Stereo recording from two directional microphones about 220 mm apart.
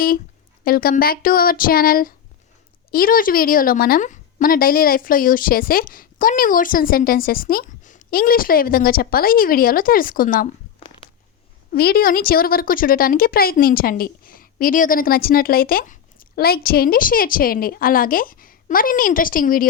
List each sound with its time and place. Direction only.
0.6 s a woman's voice: 40° left (ahead or behind)
11.7 s a woman's voice: 45° left (ahead or behind)